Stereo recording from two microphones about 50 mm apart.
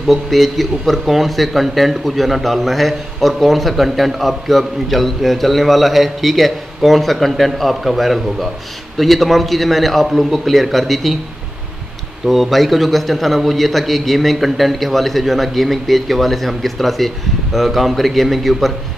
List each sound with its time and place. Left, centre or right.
0.0 s speech: centre
12.3 s speech: centre